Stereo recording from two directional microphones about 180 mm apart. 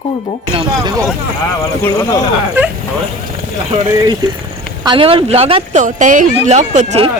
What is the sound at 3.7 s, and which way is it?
Speech, 30° right (ahead or behind).